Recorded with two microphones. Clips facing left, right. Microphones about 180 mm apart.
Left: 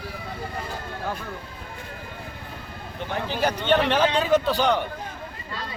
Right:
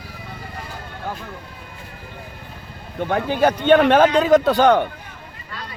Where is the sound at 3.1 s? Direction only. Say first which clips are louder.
Right 7 dB; 55° right (ahead or behind).